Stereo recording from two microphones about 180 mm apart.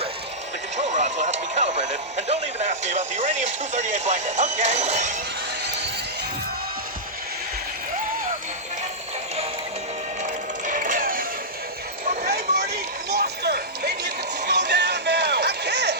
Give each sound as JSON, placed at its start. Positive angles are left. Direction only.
{"t": 0.8, "sound": "speech", "side_deg": -40}
{"t": 10.2, "sound": "music", "side_deg": -45}